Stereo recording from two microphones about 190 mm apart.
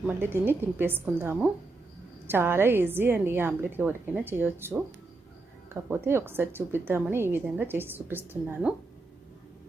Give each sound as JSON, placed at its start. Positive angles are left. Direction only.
{"t": 0.0, "sound": "a woman's voice", "side_deg": -10}